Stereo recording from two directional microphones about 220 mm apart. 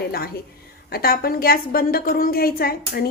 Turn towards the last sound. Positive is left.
turn(degrees=45)  # may be behind; listen again after turning